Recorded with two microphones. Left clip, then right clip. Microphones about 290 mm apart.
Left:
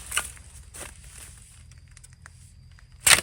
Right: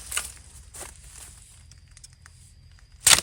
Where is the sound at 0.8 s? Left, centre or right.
Right.